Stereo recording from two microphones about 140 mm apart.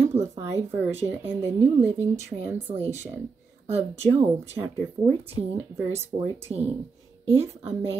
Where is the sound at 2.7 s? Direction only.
45° right (ahead or behind).